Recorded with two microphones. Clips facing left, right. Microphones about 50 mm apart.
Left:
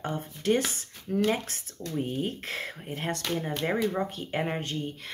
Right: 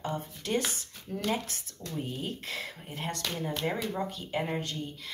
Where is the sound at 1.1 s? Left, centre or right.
Left.